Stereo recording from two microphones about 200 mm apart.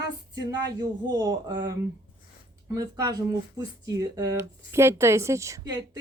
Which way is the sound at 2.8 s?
15° right (ahead or behind).